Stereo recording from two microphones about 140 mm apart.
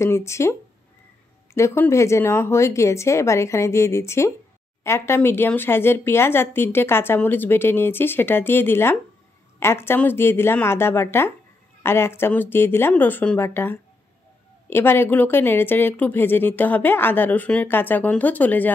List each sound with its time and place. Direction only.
0.0 s speech: 20° left (ahead or behind)